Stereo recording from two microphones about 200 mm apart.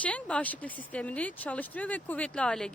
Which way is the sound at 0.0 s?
5° left (ahead or behind).